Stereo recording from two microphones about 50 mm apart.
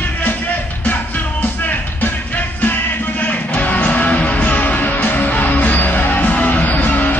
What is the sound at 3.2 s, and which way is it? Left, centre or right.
Music, left.